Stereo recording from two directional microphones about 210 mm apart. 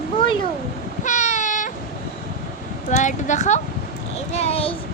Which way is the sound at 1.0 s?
35° left (ahead or behind).